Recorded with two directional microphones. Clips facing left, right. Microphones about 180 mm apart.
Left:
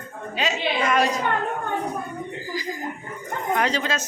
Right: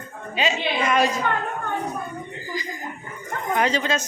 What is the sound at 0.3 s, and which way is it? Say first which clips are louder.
Speech: right 1 dB; centre (ahead or behind).